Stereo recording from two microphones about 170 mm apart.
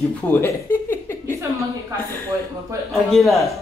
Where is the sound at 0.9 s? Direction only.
15° left (ahead or behind).